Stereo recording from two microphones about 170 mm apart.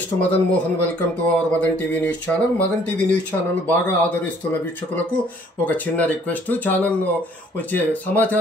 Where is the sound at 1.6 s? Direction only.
10° left (ahead or behind).